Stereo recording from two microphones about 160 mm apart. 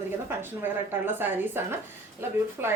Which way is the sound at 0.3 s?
10° right (ahead or behind).